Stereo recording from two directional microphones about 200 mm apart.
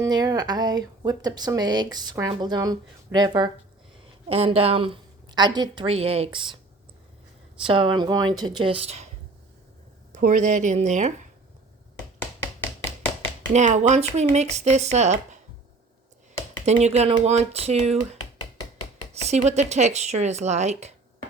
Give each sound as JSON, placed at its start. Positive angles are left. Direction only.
{"t": 0.0, "sound": "speech", "side_deg": -20}
{"t": 7.6, "sound": "speech", "side_deg": -25}
{"t": 10.1, "sound": "speech", "side_deg": -40}
{"t": 13.5, "sound": "speech", "side_deg": -35}
{"t": 16.6, "sound": "speech", "side_deg": -35}